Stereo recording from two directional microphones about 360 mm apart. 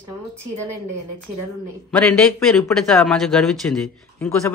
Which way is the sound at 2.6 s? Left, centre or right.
Centre.